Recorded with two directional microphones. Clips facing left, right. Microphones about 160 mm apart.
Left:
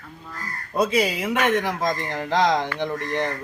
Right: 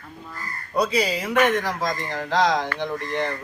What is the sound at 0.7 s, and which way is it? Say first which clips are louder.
Speech: left 1 dB; 20° left (ahead or behind).